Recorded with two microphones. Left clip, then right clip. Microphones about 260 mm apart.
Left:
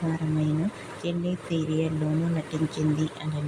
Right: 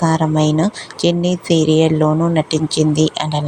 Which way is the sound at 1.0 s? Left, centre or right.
Right.